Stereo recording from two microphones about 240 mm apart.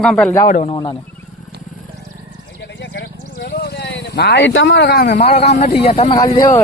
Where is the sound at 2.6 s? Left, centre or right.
Left.